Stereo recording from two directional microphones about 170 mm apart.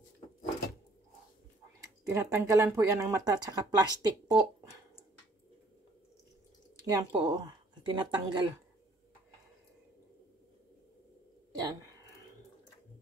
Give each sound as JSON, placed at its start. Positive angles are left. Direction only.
{"t": 2.0, "sound": "speech", "side_deg": -15}
{"t": 6.8, "sound": "speech", "side_deg": -25}
{"t": 11.6, "sound": "a sound", "side_deg": -20}